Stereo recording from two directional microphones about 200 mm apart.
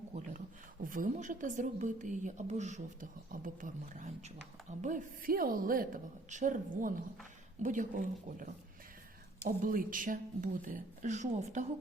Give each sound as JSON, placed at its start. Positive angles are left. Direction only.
{"t": 0.1, "sound": "a woman's voice", "side_deg": -35}
{"t": 9.6, "sound": "a woman's voice", "side_deg": -45}